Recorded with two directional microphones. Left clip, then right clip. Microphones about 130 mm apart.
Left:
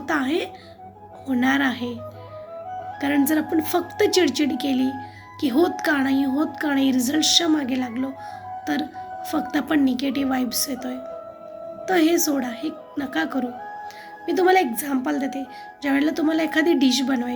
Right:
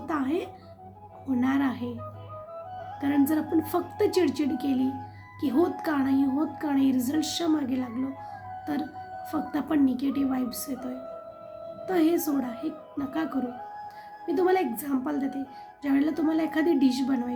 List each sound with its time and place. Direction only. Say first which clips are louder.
0.1 s speech: left 6 dB; 10° right (ahead or behind)
3.0 s speech: left 4 dB; 10° right (ahead or behind)